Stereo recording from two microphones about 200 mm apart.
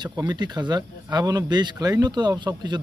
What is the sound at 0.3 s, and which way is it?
Speech, 20° right (ahead or behind).